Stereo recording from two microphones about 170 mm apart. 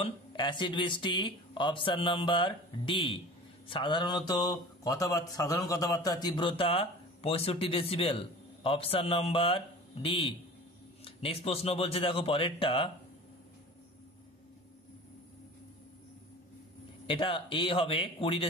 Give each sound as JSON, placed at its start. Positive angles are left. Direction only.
{"t": 0.0, "sound": "a man's voice", "side_deg": 30}
{"t": 17.0, "sound": "a man's voice", "side_deg": 30}